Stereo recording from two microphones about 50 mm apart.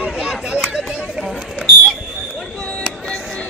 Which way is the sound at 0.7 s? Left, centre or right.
Centre.